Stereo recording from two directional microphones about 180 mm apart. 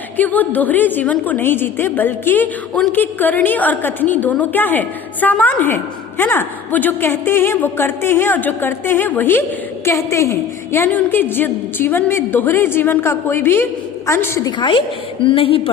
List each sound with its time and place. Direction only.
0.2 s a woman's voice: 10° left (ahead or behind); by 15.7 s 30° left (ahead or behind)